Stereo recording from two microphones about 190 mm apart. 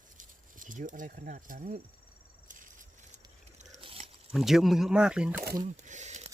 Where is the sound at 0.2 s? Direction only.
45° right (ahead or behind).